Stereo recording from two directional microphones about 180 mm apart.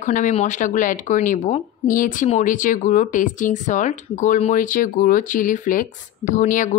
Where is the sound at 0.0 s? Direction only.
45° left (ahead or behind).